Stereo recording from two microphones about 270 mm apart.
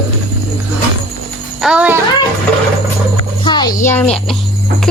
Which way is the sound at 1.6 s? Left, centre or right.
Centre.